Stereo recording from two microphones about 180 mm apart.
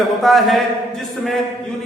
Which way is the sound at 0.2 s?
Centre (ahead or behind).